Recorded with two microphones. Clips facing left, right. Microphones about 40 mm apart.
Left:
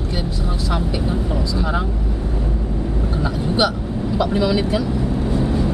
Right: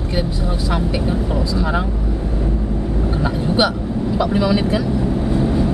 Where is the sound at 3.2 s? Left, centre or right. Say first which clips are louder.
Right 1 dB; centre.